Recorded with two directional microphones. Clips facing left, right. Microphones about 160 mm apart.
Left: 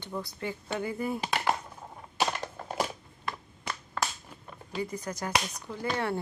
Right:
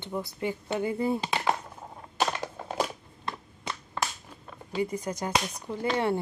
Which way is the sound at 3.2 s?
25° right (ahead or behind).